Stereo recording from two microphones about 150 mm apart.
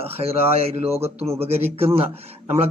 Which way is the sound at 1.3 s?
40° right (ahead or behind).